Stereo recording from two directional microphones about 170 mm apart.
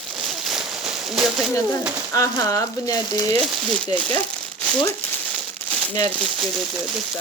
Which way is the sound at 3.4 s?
10° left (ahead or behind).